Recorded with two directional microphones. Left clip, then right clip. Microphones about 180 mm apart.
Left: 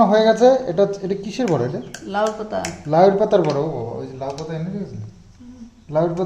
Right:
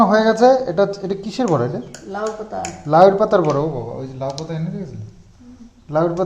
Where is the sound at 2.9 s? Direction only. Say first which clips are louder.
Right 3 dB; 10° right (ahead or behind).